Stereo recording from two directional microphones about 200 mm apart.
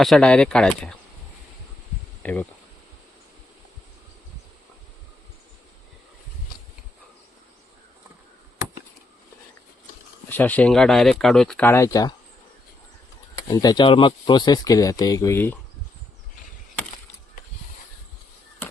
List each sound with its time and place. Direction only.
0.0 s speech: 5° left (ahead or behind)
2.2 s speech: 10° left (ahead or behind)
10.2 s speech: 10° left (ahead or behind)
13.5 s speech: 20° left (ahead or behind)